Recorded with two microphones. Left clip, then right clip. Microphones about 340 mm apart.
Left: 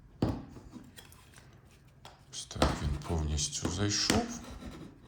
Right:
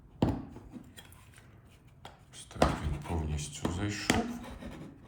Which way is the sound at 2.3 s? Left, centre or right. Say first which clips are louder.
Right 2 dB; centre.